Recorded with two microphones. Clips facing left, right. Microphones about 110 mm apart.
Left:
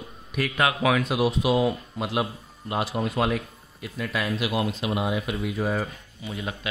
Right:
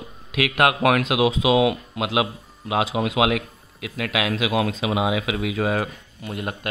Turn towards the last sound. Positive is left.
turn(degrees=-60)  # may be behind; listen again after turning